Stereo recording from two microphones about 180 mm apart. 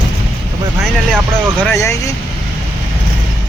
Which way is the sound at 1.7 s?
15° left (ahead or behind).